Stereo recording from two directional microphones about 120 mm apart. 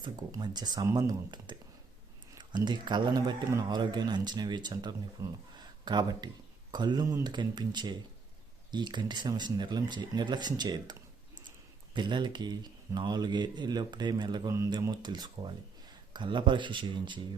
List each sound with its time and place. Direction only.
0.0 s speech: 35° right (ahead or behind)
5.2 s speech: 25° right (ahead or behind)
5.5 s speech: 35° right (ahead or behind)
11.9 s speech: 40° right (ahead or behind)